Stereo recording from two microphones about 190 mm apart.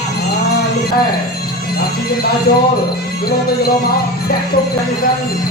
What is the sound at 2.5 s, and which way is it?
Speech, 55° left (ahead or behind).